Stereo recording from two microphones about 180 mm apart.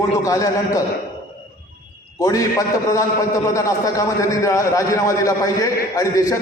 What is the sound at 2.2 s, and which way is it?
A man's voice, 20° left (ahead or behind).